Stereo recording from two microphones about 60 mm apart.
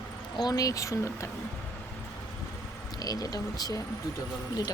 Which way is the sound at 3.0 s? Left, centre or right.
Left.